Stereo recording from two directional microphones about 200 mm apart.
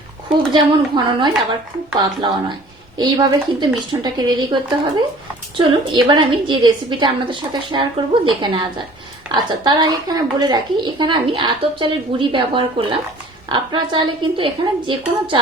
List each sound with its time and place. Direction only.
0.5 s a woman's voice: 25° right (ahead or behind)